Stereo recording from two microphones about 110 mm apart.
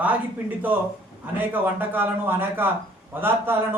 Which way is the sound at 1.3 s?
15° right (ahead or behind).